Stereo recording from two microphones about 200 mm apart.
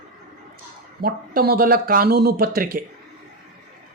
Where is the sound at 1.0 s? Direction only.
45° right (ahead or behind).